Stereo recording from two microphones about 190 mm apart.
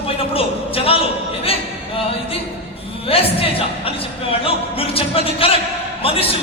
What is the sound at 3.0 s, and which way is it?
Music, 30° left (ahead or behind).